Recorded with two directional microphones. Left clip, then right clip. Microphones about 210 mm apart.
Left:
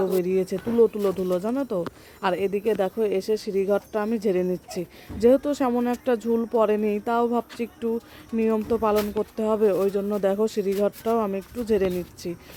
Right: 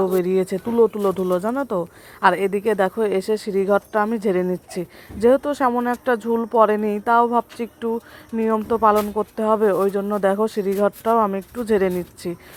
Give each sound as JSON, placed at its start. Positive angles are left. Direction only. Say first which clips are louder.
{"t": 0.2, "sound": "speech", "louder": "right 4 dB", "side_deg": 0}